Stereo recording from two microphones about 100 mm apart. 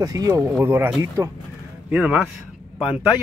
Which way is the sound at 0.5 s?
20° right (ahead or behind).